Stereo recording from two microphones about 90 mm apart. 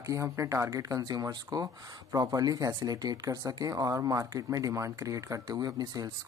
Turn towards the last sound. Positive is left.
turn(degrees=-45)  # may be behind; listen again after turning